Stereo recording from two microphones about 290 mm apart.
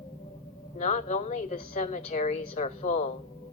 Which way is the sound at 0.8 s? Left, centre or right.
Left.